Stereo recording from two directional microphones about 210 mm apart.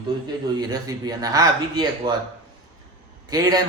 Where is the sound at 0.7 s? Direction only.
15° right (ahead or behind).